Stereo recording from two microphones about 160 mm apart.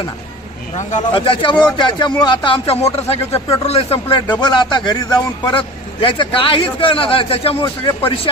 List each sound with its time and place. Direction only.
1.1 s speech: 35° left (ahead or behind)